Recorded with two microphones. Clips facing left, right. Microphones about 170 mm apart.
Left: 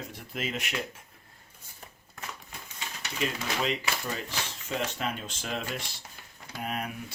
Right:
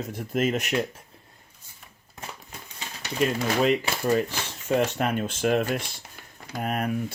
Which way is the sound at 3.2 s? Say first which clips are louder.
Right 8 dB; 50° right (ahead or behind).